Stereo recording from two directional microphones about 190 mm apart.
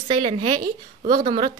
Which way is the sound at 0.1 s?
25° right (ahead or behind).